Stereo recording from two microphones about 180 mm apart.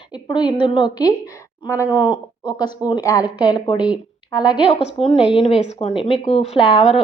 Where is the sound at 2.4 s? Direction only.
20° left (ahead or behind).